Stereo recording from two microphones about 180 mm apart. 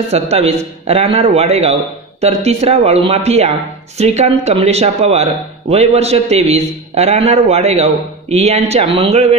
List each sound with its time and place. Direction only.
0.1 s speech: 35° right (ahead or behind)